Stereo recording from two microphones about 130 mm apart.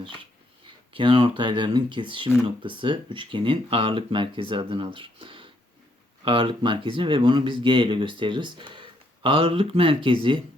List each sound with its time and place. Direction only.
0.9 s speech: 40° right (ahead or behind)